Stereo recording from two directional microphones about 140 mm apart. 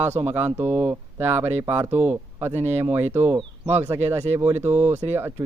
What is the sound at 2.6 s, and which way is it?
Speech, 50° right (ahead or behind).